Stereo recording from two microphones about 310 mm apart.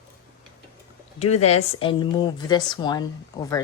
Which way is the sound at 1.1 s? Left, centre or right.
Left.